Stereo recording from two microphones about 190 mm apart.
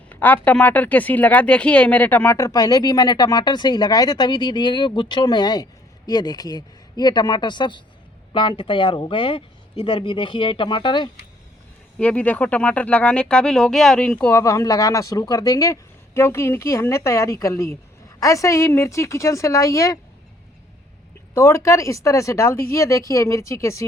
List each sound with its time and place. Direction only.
0.1 s speech: 10° left (ahead or behind)
11.9 s speech: 5° left (ahead or behind)
21.3 s speech: 15° left (ahead or behind)